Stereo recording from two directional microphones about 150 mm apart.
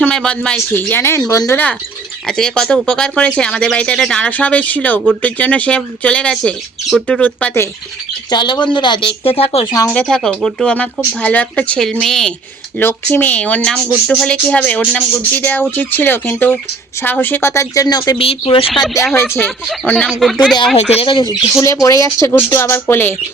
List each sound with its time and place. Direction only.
0.0 s speech: 5° left (ahead or behind)
2.2 s speech: 5° left (ahead or behind)
8.3 s speech: 30° left (ahead or behind)
9.9 s speech: 5° left (ahead or behind); by 18.6 s 35° left (ahead or behind)
19.1 s speech: 15° left (ahead or behind)
19.5 s speech: centre (ahead or behind)
20.9 s speech: 35° left (ahead or behind)
21.5 s speech: 20° left (ahead or behind)